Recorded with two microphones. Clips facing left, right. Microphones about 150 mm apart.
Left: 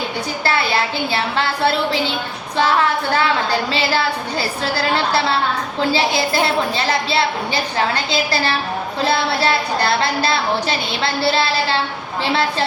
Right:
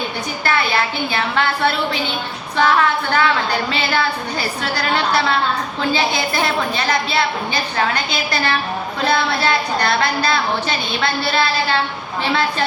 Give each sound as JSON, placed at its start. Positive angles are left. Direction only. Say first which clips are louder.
{"t": 1.1, "sound": "a woman's voice", "louder": "right 2 dB", "side_deg": 30}